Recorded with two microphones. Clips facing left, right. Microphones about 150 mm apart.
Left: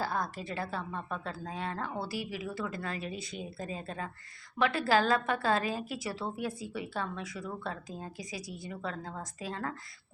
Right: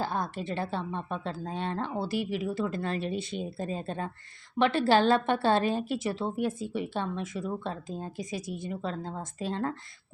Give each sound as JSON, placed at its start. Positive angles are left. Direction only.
{"t": 0.0, "sound": "speech", "side_deg": -25}